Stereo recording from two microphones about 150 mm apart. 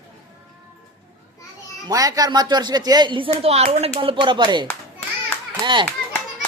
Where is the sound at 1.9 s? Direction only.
25° right (ahead or behind).